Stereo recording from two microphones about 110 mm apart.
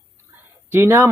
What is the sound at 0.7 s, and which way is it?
Speech, 20° right (ahead or behind).